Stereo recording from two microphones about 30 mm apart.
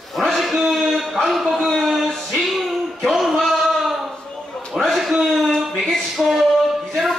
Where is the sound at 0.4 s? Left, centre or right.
Centre.